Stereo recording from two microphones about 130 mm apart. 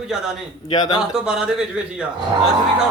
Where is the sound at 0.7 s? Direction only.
35° left (ahead or behind).